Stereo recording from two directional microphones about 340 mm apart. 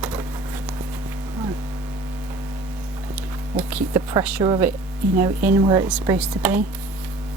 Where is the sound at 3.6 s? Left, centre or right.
Centre.